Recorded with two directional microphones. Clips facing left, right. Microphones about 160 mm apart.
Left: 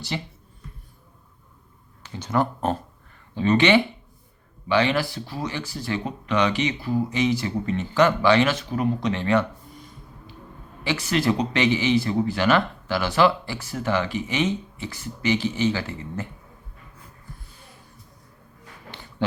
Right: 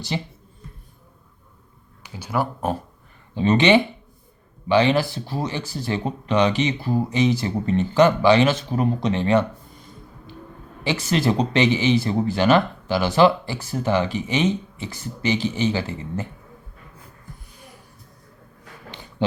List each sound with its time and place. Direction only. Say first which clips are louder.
0.1 s speech: right 3 dB; 20° right (ahead or behind)
2.0 s speech: left 1 dB; 10° right (ahead or behind)
3.3 s speech: right 2 dB; 20° right (ahead or behind)
10.8 s speech: right 1 dB; 25° right (ahead or behind)